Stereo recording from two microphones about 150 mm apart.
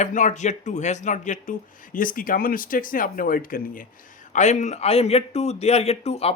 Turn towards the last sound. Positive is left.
turn(degrees=45)  # may be behind; listen again after turning